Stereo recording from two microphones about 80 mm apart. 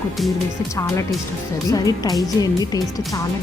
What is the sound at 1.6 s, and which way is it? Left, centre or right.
Speech, left.